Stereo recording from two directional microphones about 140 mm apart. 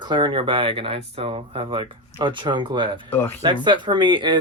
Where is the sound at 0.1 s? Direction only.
35° right (ahead or behind).